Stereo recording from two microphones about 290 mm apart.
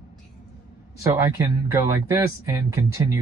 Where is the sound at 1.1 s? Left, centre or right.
Centre.